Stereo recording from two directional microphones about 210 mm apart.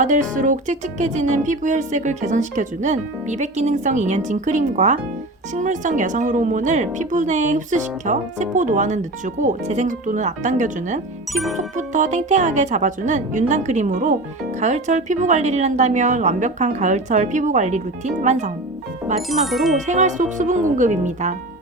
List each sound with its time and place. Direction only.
0.0 s speech: 35° right (ahead or behind)
19.3 s speech: centre (ahead or behind)
19.7 s speech: 35° right (ahead or behind)